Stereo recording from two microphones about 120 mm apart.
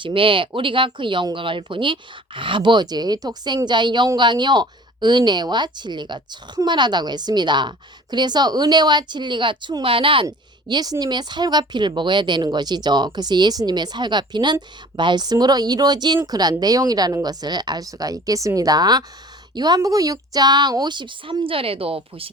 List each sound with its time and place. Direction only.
0.0 s speech: 45° right (ahead or behind)
10.2 s speech: 35° right (ahead or behind); by 22.3 s 50° right (ahead or behind)